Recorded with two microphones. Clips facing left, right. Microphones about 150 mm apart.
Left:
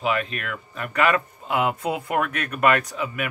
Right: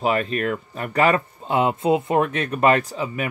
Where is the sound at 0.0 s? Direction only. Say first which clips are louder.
Right 4 dB; 40° right (ahead or behind).